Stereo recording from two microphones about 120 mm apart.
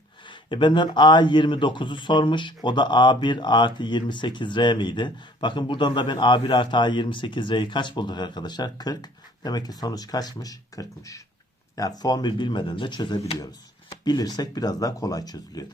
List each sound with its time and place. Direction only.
0.3 s a man's voice: 40° left (ahead or behind)
13.9 s a man's voice: 35° left (ahead or behind)